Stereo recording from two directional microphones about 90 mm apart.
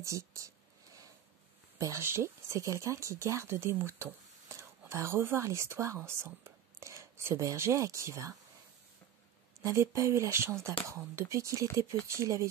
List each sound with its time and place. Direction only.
0.0 s speech: 35° right (ahead or behind)
1.8 s speech: 35° right (ahead or behind)
9.6 s speech: 30° right (ahead or behind)